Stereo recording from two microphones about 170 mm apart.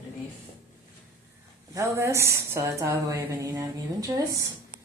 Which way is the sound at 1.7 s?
20° right (ahead or behind).